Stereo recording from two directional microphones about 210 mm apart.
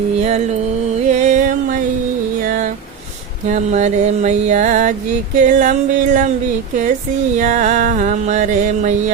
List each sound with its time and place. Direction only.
0.2 s mantra: 30° right (ahead or behind)
1.2 s a sound: 35° right (ahead or behind)
3.5 s music: 35° right (ahead or behind)
7.3 s music: 35° right (ahead or behind)